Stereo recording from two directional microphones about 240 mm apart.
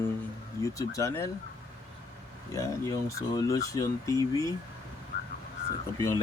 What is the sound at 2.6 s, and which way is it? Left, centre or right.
Speech, centre.